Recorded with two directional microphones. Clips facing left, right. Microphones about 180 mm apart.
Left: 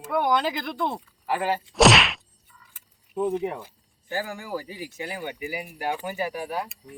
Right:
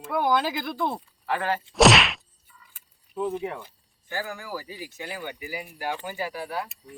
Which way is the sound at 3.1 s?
25° left (ahead or behind).